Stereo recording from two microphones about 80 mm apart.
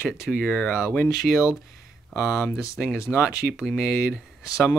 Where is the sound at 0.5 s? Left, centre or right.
Centre.